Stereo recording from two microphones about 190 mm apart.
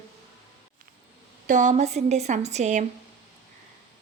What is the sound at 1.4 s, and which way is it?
A woman's voice, 40° right (ahead or behind).